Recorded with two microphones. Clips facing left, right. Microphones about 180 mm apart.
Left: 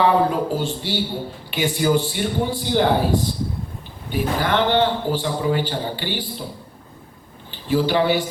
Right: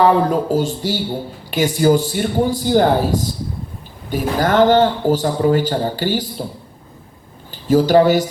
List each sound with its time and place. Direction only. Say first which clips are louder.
0.0 s a man's voice: right 3 dB; 40° right (ahead or behind)
7.5 s speech: right 7 dB; 40° right (ahead or behind)